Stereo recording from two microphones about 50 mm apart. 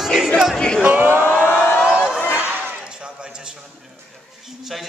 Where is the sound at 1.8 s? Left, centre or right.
Centre.